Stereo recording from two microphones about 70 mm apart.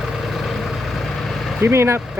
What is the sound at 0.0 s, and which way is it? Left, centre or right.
Vehicle, centre.